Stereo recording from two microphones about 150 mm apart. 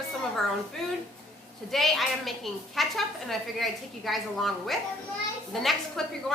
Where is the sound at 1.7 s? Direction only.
Centre (ahead or behind).